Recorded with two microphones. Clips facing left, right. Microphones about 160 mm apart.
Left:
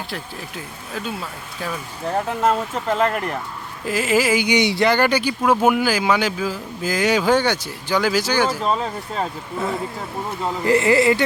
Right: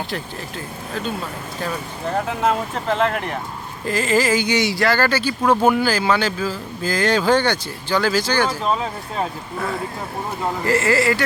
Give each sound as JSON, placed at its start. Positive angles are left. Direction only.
{"t": 2.4, "sound": "speech", "side_deg": 5}
{"t": 8.6, "sound": "speech", "side_deg": 0}
{"t": 10.7, "sound": "speech", "side_deg": 20}